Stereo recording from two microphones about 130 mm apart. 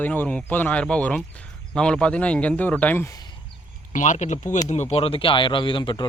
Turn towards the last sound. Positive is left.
turn(degrees=40)  # may be behind; listen again after turning